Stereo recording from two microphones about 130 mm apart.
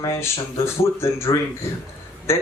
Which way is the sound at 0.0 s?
20° left (ahead or behind).